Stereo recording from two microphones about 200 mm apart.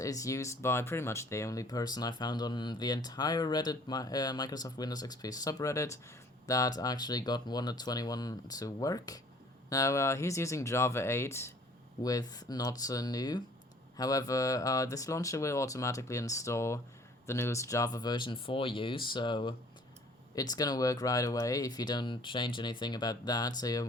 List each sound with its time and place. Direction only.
0.0 s speech: 15° left (ahead or behind)